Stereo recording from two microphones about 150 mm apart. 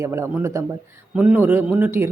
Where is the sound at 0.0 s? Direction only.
15° right (ahead or behind).